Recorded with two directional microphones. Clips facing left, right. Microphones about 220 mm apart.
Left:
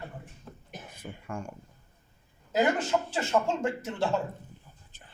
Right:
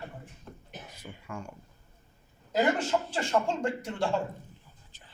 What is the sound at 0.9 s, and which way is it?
Speech, 50° left (ahead or behind).